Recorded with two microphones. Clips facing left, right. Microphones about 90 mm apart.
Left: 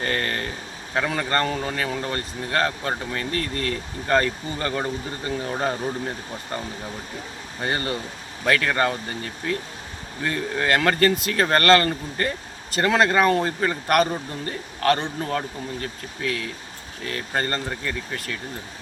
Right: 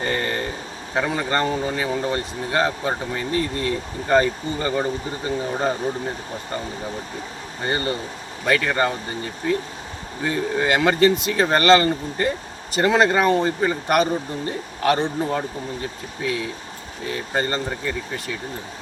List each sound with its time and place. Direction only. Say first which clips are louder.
0.0 s a sound: right 2 dB; 5° right (ahead or behind)
0.9 s speech: right 1 dB; 5° right (ahead or behind)
7.6 s speech: right 2 dB; centre (ahead or behind)
10.2 s speech: right 2 dB; 10° right (ahead or behind)
14.8 s speech: right 2 dB; 15° right (ahead or behind)